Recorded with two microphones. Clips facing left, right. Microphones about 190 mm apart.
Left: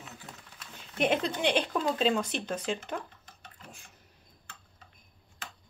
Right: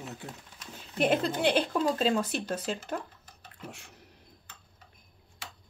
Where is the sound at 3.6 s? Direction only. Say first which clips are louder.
Right 10 dB; 75° right (ahead or behind).